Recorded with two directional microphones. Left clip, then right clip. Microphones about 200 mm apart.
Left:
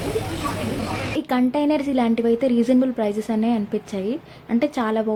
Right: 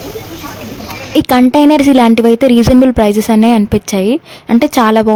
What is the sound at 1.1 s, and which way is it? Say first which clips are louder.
A woman's voice: right 15 dB; 55° right (ahead or behind).